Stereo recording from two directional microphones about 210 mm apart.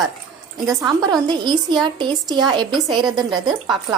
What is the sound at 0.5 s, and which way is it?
A woman's voice, 20° right (ahead or behind).